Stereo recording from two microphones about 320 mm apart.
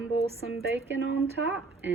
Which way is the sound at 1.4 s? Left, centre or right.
Right.